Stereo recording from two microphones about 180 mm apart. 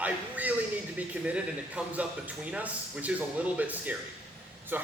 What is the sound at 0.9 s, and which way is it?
Speech, 5° right (ahead or behind).